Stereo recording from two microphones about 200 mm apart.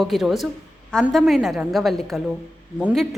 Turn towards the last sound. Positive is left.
turn(degrees=-5)  # may be behind; listen again after turning